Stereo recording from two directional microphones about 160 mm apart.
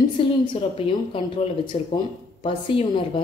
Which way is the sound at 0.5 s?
35° left (ahead or behind).